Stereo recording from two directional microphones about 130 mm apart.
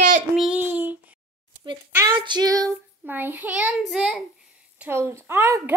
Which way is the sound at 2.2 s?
30° right (ahead or behind).